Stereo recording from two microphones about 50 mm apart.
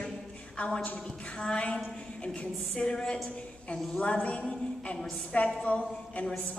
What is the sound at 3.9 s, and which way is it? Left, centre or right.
A woman's voice, left.